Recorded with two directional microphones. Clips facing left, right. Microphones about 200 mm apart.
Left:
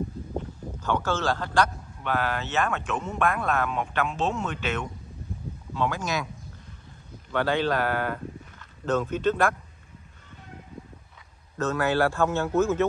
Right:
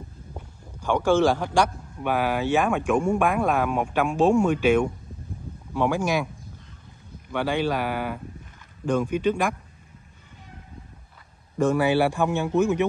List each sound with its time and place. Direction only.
0.4 s speech: 10° right (ahead or behind)
7.2 s speech: 10° right (ahead or behind)
11.5 s speech: 10° right (ahead or behind)